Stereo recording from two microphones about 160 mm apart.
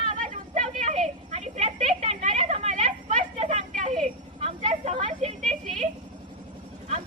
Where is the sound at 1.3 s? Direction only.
40° right (ahead or behind).